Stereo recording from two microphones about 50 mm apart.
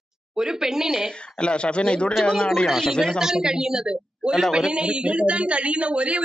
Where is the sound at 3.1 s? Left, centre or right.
Centre.